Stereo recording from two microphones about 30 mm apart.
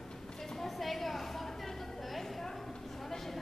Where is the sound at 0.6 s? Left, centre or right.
Centre.